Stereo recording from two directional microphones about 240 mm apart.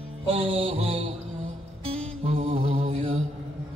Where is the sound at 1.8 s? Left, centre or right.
Right.